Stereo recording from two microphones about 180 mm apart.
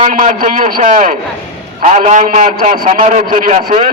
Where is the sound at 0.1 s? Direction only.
45° right (ahead or behind).